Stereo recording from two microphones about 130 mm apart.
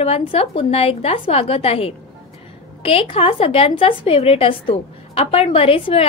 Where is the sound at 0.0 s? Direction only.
50° left (ahead or behind).